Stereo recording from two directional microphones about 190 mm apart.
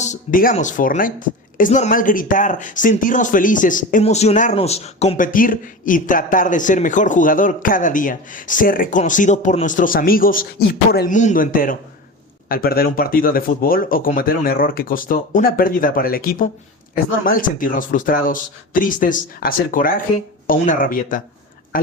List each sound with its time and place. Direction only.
0.0 s speech: 40° left (ahead or behind)